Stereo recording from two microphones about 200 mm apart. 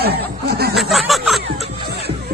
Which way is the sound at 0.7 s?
Centre (ahead or behind).